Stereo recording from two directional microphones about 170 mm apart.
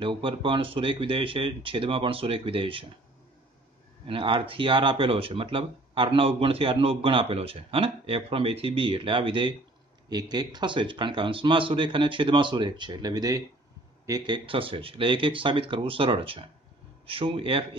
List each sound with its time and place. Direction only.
0.0 s speech: 30° right (ahead or behind)
4.1 s speech: 30° right (ahead or behind)